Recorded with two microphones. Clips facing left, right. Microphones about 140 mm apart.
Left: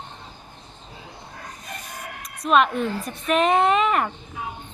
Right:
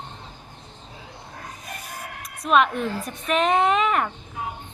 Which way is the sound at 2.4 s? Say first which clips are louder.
Left 1 dB; centre (ahead or behind).